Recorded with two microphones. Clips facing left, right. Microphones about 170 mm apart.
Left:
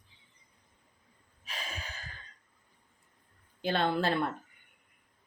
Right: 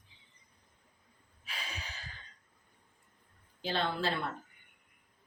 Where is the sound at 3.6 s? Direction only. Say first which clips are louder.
Left 4 dB; 55° left (ahead or behind).